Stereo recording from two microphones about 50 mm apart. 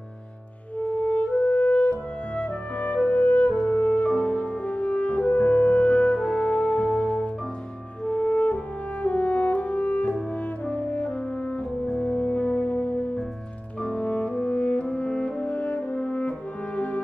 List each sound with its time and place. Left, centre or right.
0.8 s music: left
9.0 s french horn: left
10.6 s music: left
11.8 s music: centre
12.2 s music: left